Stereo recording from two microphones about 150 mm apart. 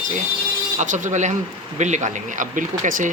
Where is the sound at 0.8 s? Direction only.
55° right (ahead or behind).